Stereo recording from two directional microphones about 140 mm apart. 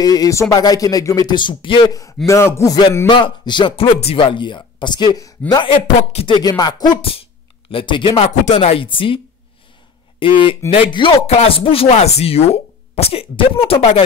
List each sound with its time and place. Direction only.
0.0 s speech: 25° left (ahead or behind)
2.2 s speech: 20° left (ahead or behind)
3.1 s speech: 35° left (ahead or behind)
5.5 s speech: 40° left (ahead or behind)
6.4 s speech: 30° left (ahead or behind); by 14.0 s 45° left (ahead or behind)